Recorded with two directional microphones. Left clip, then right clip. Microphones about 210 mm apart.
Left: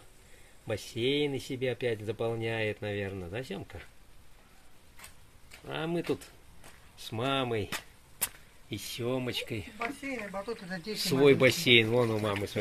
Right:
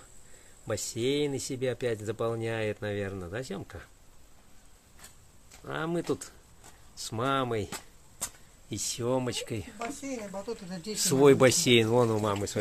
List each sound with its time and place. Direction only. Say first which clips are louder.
0.7 s speech: right 1 dB; 5° right (ahead or behind)
5.7 s speech: right 1 dB; 5° right (ahead or behind)